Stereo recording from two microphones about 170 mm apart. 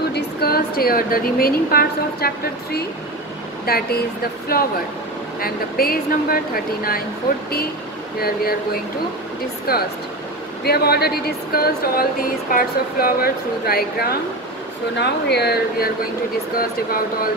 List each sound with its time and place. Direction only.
0.1 s speech: 65° left (ahead or behind)
9.7 s speech: 65° left (ahead or behind)
15.0 s speech: 80° left
16.5 s speech: 60° left (ahead or behind)